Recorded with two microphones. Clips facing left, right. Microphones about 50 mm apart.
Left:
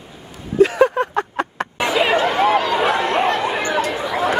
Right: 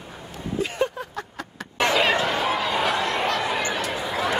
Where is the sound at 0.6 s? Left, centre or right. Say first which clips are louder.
Left 13 dB; left.